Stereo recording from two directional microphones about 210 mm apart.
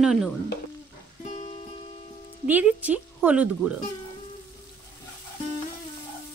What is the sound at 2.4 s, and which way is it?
Speech, 10° right (ahead or behind).